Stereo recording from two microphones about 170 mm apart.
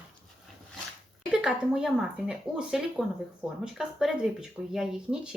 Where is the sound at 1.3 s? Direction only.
5° right (ahead or behind).